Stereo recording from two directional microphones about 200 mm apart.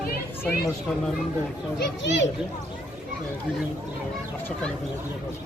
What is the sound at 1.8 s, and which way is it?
Speech, 65° left (ahead or behind).